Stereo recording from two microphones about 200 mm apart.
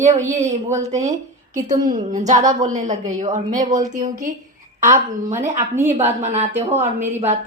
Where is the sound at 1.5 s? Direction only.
40° right (ahead or behind).